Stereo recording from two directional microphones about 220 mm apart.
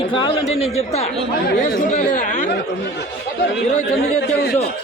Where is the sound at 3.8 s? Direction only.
50° left (ahead or behind).